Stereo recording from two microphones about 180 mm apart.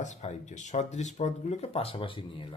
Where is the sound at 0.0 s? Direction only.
40° left (ahead or behind).